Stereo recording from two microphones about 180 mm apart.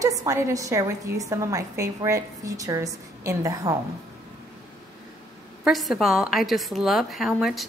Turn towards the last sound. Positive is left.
turn(degrees=0)  # may be behind; listen again after turning